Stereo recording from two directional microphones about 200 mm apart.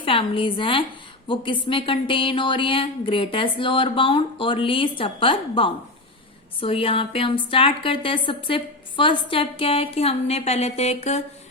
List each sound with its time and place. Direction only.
0.0 s a woman's voice: 25° left (ahead or behind)